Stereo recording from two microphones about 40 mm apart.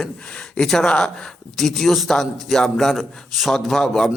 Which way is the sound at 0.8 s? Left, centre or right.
Left.